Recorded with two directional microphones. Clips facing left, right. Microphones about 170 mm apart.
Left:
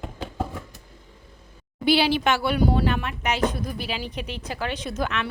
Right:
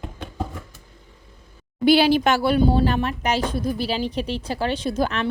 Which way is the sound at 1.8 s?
45° right (ahead or behind).